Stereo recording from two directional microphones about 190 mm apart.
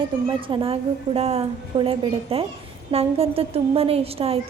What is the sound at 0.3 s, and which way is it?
A woman's voice, 25° right (ahead or behind).